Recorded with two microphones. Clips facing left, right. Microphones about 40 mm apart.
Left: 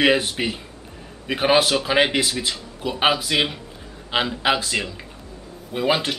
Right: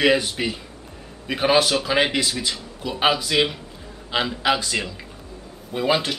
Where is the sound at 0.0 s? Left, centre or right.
Left.